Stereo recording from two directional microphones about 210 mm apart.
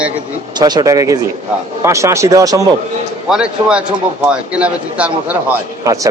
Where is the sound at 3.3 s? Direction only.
5° right (ahead or behind).